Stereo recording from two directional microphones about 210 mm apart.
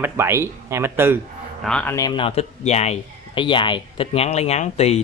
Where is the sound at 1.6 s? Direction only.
5° left (ahead or behind).